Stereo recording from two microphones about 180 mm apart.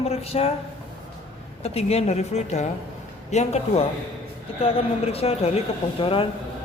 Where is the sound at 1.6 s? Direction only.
35° left (ahead or behind).